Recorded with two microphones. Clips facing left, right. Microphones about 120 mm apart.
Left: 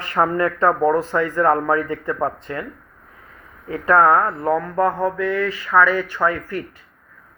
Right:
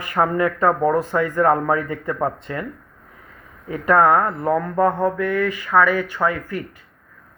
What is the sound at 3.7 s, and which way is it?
Speech, 25° left (ahead or behind).